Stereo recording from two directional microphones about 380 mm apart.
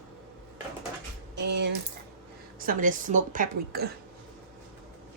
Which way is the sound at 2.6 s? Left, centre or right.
Right.